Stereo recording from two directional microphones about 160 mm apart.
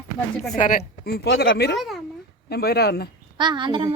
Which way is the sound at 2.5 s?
85° left.